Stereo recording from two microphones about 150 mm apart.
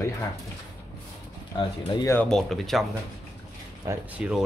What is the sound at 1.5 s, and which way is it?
Speech, 30° left (ahead or behind).